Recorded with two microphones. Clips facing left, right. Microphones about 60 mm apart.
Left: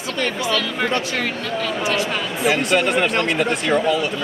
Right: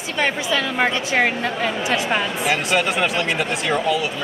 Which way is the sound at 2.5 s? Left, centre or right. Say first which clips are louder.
Left 3 dB; centre.